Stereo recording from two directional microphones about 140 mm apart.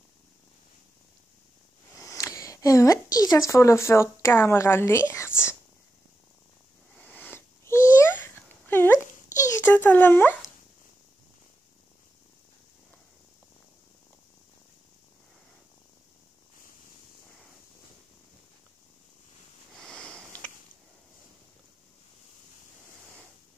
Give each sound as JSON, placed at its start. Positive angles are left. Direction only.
{"t": 2.0, "sound": "a woman's voice", "side_deg": 20}
{"t": 6.9, "sound": "babbling", "side_deg": 10}
{"t": 9.7, "sound": "dog", "side_deg": 10}
{"t": 19.7, "sound": "sniff", "side_deg": 5}